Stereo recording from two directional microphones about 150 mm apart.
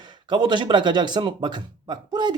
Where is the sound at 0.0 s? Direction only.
30° right (ahead or behind).